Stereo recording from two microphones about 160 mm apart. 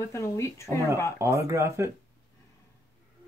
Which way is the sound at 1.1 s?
15° right (ahead or behind).